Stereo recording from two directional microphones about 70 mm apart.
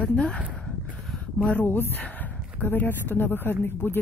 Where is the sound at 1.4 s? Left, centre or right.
Centre.